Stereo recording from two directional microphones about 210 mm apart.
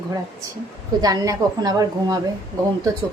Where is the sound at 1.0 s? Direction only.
20° right (ahead or behind).